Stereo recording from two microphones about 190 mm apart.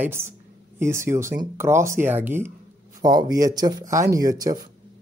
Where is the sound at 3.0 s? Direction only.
20° right (ahead or behind).